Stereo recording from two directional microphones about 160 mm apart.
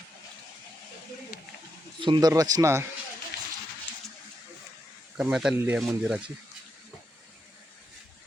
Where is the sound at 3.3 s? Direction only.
90° left.